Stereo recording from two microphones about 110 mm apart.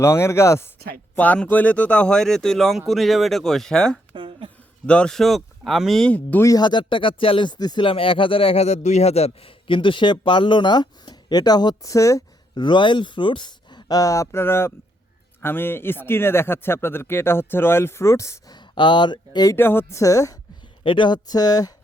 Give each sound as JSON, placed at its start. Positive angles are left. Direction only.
{"t": 0.0, "sound": "speech", "side_deg": 25}
{"t": 1.1, "sound": "speech", "side_deg": 15}
{"t": 4.1, "sound": "a sound", "side_deg": -50}
{"t": 4.9, "sound": "speech", "side_deg": 10}
{"t": 6.6, "sound": "a man's voice", "side_deg": 45}
{"t": 7.9, "sound": "a man's voice", "side_deg": 55}
{"t": 12.5, "sound": "a man's voice", "side_deg": 45}
{"t": 18.5, "sound": "speech", "side_deg": 45}
{"t": 19.5, "sound": "speech", "side_deg": 20}
{"t": 20.8, "sound": "speech", "side_deg": 45}